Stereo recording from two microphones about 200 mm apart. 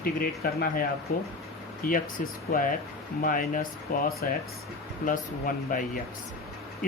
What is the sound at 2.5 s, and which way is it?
Speech, 50° left (ahead or behind).